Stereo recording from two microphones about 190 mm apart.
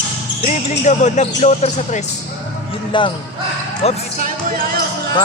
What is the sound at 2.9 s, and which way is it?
Speech, 25° left (ahead or behind).